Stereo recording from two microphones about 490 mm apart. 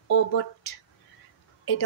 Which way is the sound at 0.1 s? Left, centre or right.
Left.